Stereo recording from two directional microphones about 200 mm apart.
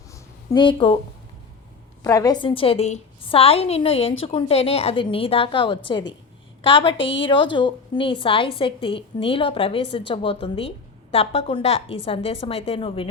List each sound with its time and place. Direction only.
0.5 s a woman's voice: 25° left (ahead or behind)
2.0 s a woman's voice: 15° left (ahead or behind)